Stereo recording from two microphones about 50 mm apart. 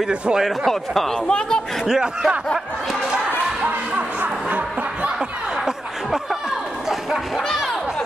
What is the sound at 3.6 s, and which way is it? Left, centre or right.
Snicker, right.